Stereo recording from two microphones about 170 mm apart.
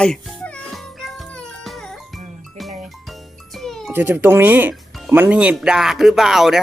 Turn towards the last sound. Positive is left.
turn(degrees=0)  # may be behind; listen again after turning